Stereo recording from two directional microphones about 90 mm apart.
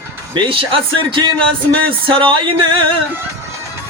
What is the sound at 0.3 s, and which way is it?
Speech, 70° right (ahead or behind).